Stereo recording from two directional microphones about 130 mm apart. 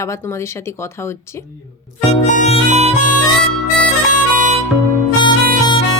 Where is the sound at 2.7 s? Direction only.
55° right (ahead or behind).